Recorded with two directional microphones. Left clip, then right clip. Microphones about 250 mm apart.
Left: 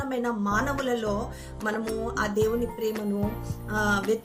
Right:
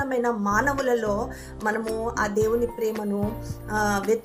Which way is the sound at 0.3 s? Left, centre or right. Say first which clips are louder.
Right 3 dB; centre.